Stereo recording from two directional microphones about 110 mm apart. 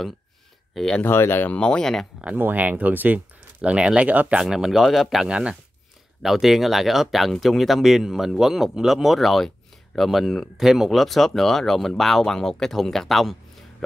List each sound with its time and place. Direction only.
0.7 s speech: 5° left (ahead or behind)
1.0 s speech: 20° left (ahead or behind); by 2.0 s 5° left (ahead or behind)
2.2 s speech: 15° right (ahead or behind); by 13.8 s centre (ahead or behind)